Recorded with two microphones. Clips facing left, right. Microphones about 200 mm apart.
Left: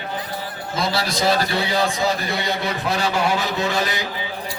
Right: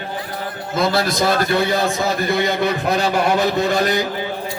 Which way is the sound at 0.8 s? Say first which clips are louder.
Right 5 dB; 50° right (ahead or behind).